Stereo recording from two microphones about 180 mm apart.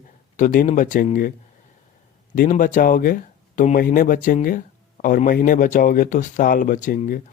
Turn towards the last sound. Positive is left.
turn(degrees=50)  # may be behind; listen again after turning